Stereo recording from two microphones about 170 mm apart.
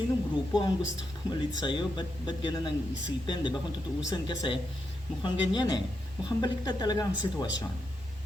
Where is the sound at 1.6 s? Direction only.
25° left (ahead or behind).